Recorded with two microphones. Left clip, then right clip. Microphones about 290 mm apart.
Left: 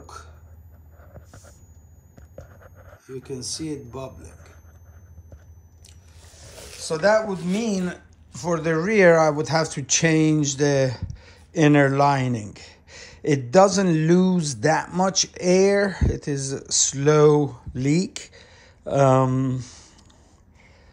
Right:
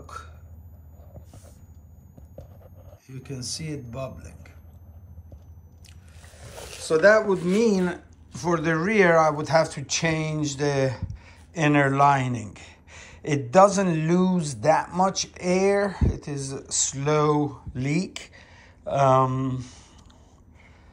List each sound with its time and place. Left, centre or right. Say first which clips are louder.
0.0 s hiccup: right 2 dB; centre
2.3 s a sound: left 3 dB; centre
3.3 s speech: left 3 dB; centre
6.9 s speech: right 2 dB; centre